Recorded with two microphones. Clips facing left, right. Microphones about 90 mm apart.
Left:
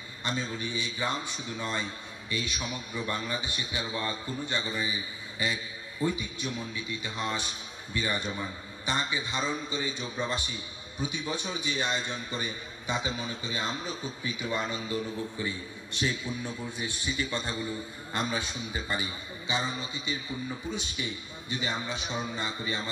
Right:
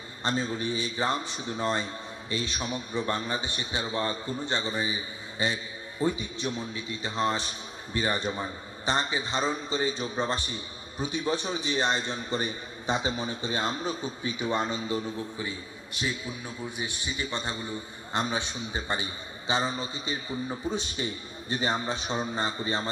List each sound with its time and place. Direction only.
0.2 s a man's voice: 35° right (ahead or behind)
16.7 s a man's voice: 20° right (ahead or behind); by 22.8 s 35° right (ahead or behind)